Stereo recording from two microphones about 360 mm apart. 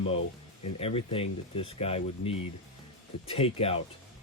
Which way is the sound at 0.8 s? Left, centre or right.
Centre.